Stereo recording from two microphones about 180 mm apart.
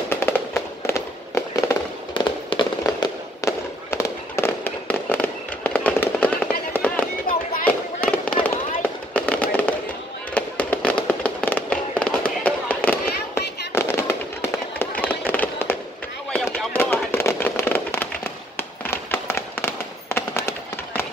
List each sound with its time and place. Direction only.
0.1 s fireworks: 10° left (ahead or behind)
16.3 s a sound: 5° left (ahead or behind)
16.7 s firecracker: 10° left (ahead or behind)
18.9 s fireworks: 15° left (ahead or behind)